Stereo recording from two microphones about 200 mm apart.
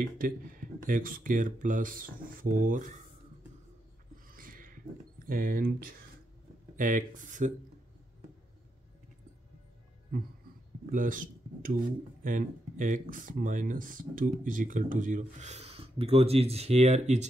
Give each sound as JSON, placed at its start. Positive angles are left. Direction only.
{"t": 0.0, "sound": "speech", "side_deg": -45}
{"t": 4.3, "sound": "a sound", "side_deg": -45}
{"t": 5.2, "sound": "speech", "side_deg": -45}
{"t": 10.9, "sound": "speech", "side_deg": -40}